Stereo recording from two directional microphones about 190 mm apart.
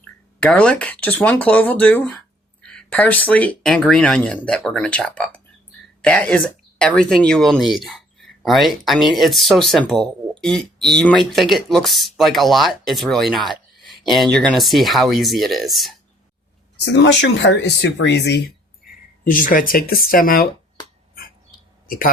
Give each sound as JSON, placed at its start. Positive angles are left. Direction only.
{"t": 0.3, "sound": "speech", "side_deg": 5}
{"t": 16.8, "sound": "speech", "side_deg": 65}
{"t": 19.2, "sound": "speech", "side_deg": 45}
{"t": 21.8, "sound": "a man's voice", "side_deg": 50}